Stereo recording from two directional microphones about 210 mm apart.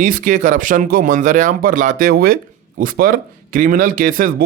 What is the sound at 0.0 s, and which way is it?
Speech, 40° right (ahead or behind).